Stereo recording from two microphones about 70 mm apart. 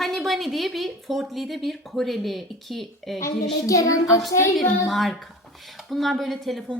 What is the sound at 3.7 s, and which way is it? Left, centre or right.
Child singing, left.